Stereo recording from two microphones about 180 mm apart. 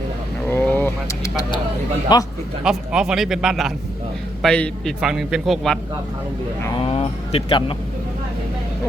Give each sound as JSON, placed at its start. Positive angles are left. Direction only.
{"t": 0.4, "sound": "a sound", "side_deg": 10}
{"t": 2.1, "sound": "speech", "side_deg": 25}
{"t": 2.6, "sound": "speech", "side_deg": -5}
{"t": 6.8, "sound": "speech", "side_deg": 35}